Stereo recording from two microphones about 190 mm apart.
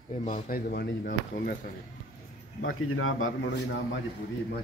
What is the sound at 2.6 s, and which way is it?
A man's voice, 90° left.